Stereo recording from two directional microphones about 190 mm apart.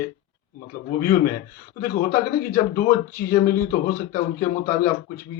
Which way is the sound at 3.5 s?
45° left (ahead or behind).